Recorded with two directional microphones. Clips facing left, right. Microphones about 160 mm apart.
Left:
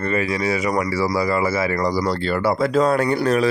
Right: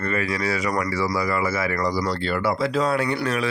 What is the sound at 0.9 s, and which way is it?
Speech, 35° left (ahead or behind).